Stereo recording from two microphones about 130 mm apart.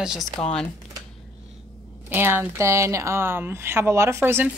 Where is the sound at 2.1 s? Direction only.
15° right (ahead or behind).